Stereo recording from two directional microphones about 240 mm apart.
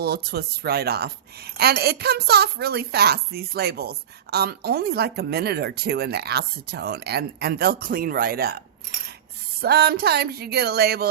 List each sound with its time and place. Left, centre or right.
0.0 s a woman's voice: right